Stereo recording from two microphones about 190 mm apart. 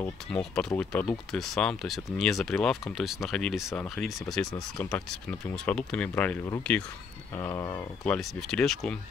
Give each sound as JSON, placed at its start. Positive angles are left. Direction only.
{"t": 0.0, "sound": "speech", "side_deg": 5}
{"t": 8.0, "sound": "speech", "side_deg": 0}